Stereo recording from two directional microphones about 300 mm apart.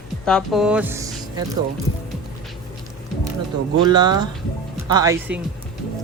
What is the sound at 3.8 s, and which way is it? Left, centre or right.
Speech, centre.